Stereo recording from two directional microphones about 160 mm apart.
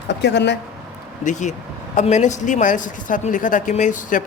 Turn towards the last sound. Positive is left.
turn(degrees=55)  # may be behind; listen again after turning